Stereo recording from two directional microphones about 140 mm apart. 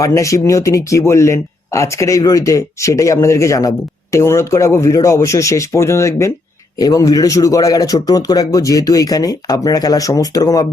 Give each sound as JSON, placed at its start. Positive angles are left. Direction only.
{"t": 0.0, "sound": "speech", "side_deg": 20}